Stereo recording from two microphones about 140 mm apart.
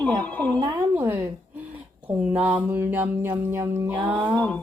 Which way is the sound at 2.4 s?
10° right (ahead or behind).